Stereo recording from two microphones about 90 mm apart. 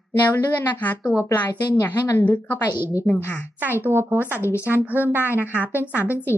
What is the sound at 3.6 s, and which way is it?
A woman's voice, 25° right (ahead or behind).